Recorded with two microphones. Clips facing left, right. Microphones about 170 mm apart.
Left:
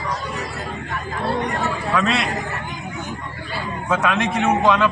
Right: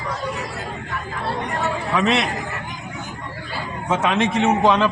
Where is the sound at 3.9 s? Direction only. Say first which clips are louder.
Right 1 dB; 25° right (ahead or behind).